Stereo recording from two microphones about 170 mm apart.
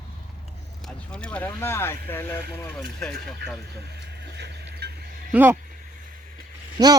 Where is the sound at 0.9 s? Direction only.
5° left (ahead or behind).